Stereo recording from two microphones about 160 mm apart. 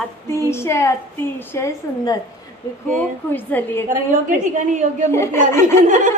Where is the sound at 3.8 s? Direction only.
55° right (ahead or behind).